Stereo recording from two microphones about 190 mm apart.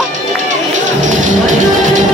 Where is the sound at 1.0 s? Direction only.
40° right (ahead or behind).